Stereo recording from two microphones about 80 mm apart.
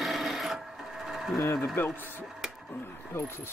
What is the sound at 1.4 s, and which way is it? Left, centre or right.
Speech, left.